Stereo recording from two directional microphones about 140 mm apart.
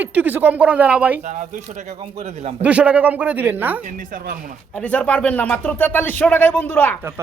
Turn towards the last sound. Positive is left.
turn(degrees=15)  # may be behind; listen again after turning